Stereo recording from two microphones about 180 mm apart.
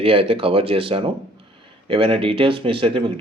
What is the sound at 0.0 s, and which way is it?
Speech, 30° right (ahead or behind).